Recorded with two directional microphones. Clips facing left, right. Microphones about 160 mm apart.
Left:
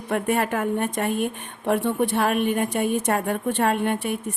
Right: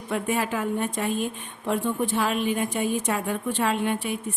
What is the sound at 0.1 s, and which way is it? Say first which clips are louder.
A woman's voice: left 3 dB; 55° left (ahead or behind).